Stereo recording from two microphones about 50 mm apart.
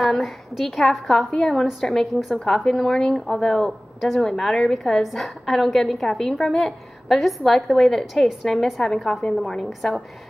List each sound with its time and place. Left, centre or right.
0.0 s a woman's voice: centre